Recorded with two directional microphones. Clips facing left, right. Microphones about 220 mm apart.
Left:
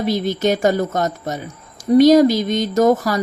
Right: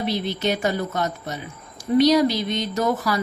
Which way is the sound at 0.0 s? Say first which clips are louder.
Left 6 dB; 45° left (ahead or behind).